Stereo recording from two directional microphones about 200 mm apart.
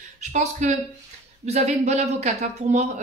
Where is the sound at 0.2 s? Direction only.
35° right (ahead or behind).